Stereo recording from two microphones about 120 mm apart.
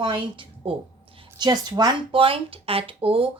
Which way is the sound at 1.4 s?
35° right (ahead or behind).